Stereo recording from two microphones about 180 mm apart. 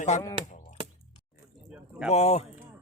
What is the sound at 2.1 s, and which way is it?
Speech, 35° left (ahead or behind).